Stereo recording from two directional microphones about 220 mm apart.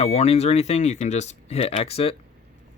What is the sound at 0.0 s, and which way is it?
Speech, 30° left (ahead or behind).